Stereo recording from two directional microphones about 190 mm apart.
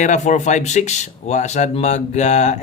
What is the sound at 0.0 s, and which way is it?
Speech, 40° left (ahead or behind).